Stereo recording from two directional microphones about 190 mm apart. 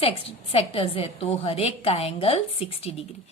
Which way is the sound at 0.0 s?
30° left (ahead or behind).